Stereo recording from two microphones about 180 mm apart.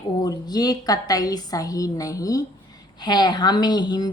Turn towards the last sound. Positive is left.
turn(degrees=25)  # may be behind; listen again after turning